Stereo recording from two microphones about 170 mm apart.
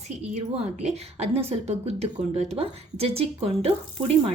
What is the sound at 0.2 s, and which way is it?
A woman's voice, 40° right (ahead or behind).